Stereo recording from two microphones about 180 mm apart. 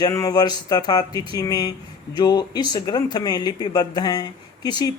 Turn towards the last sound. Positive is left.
turn(degrees=20)  # may be behind; listen again after turning